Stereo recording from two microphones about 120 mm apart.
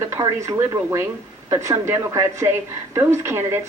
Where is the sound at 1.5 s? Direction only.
25° right (ahead or behind).